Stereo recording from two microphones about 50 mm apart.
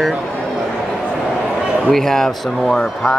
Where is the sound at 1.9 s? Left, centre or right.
Centre.